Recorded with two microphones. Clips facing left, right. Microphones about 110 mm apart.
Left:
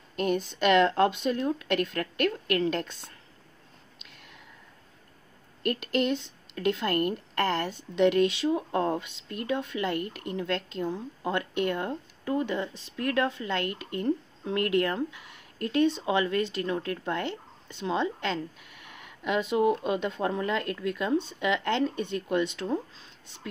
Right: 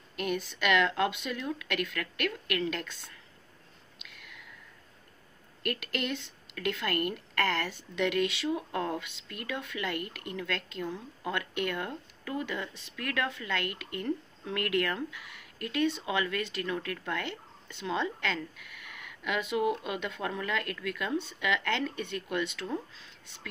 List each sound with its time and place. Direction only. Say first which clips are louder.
0.1 s speech: left 5 dB; 30° left (ahead or behind)
4.0 s a sound: right 1 dB; 35° left (ahead or behind)
5.6 s speech: left 7 dB; 25° left (ahead or behind)